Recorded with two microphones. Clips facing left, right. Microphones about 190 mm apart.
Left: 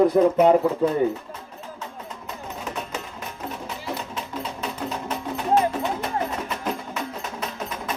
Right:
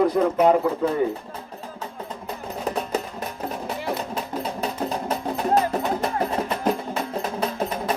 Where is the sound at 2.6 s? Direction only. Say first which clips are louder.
Right 7 dB; 35° right (ahead or behind).